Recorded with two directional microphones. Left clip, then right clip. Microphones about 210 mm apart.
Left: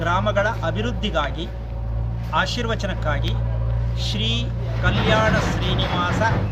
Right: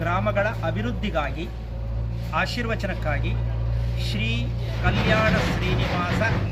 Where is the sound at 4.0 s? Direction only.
40° left (ahead or behind).